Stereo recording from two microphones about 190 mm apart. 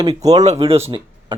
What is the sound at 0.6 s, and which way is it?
Speech, 30° right (ahead or behind).